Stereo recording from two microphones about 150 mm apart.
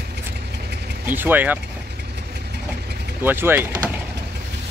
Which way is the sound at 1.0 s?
10° right (ahead or behind).